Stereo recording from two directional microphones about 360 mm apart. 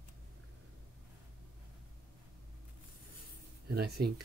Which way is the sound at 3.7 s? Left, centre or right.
Right.